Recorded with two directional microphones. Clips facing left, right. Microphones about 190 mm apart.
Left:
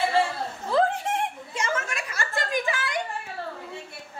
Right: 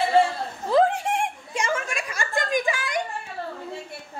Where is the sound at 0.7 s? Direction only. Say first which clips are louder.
Right 3 dB; 15° right (ahead or behind).